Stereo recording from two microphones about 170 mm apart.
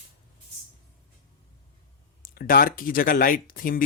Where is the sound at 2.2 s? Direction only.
60° left (ahead or behind).